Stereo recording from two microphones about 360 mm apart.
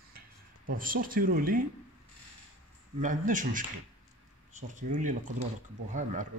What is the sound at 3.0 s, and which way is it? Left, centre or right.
Speech, right.